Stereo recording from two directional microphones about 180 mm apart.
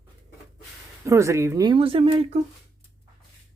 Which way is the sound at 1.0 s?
15° right (ahead or behind).